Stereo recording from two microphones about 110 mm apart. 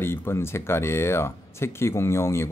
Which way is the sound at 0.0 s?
20° left (ahead or behind).